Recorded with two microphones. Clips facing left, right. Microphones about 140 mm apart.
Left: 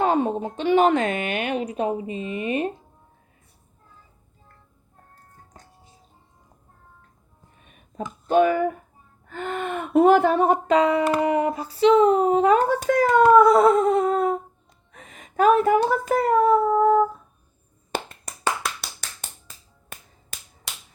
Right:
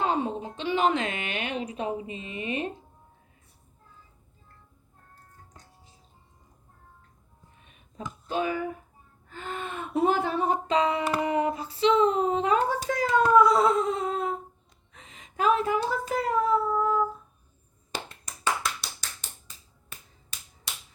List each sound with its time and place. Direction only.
0.0 s speech: 50° left (ahead or behind)
8.3 s speech: 60° left (ahead or behind)
17.9 s finger snapping: 55° left (ahead or behind)
18.6 s clapping: 60° left (ahead or behind)